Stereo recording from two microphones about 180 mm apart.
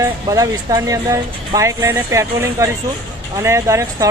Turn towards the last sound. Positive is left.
turn(degrees=-15)  # may be behind; listen again after turning